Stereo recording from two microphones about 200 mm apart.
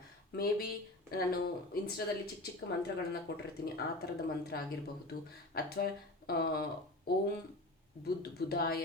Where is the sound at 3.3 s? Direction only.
55° left (ahead or behind).